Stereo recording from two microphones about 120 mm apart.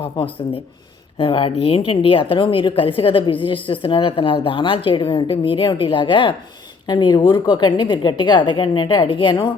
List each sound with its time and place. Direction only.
0.0 s a woman's voice: 50° left (ahead or behind)